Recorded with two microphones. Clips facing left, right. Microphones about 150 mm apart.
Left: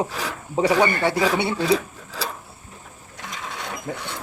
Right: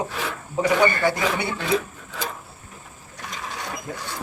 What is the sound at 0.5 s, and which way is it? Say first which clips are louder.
Speech: left 1 dB; 30° left (ahead or behind).